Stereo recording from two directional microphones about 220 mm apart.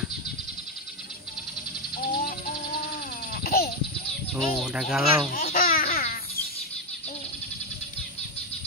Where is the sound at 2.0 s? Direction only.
40° left (ahead or behind).